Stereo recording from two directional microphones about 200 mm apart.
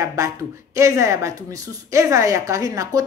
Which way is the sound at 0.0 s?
15° right (ahead or behind).